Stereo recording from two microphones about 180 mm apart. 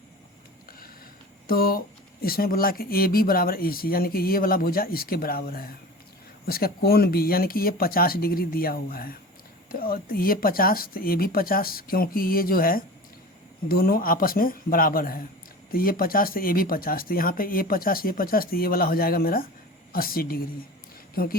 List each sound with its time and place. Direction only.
1.5 s speech: 55° left (ahead or behind)